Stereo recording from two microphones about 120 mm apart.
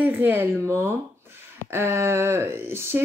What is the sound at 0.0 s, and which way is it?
Speech, 15° right (ahead or behind).